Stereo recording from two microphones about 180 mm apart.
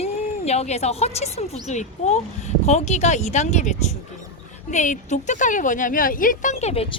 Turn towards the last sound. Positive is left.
turn(degrees=35)  # may be behind; listen again after turning